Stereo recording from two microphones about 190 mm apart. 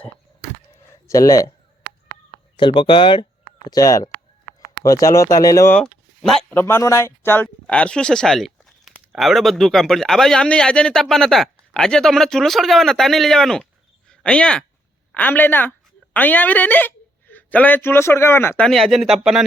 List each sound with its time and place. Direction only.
1.0 s speech: 15° left (ahead or behind)
2.6 s speech: 25° left (ahead or behind); by 19.5 s centre (ahead or behind)